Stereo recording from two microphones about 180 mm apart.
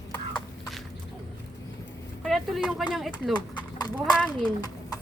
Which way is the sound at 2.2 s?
Centre (ahead or behind).